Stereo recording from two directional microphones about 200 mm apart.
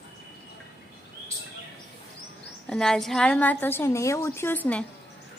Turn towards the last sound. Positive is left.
turn(degrees=5)  # may be behind; listen again after turning